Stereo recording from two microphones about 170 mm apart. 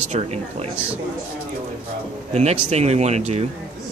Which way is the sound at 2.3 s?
40° right (ahead or behind).